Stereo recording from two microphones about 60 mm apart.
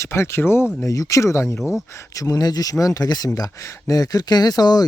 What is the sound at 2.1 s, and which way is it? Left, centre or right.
Speech, left.